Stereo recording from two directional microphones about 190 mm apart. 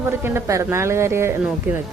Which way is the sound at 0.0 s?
10° right (ahead or behind).